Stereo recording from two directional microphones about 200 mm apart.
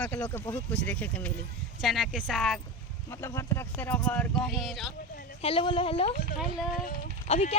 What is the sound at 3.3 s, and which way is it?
Speech, 15° left (ahead or behind).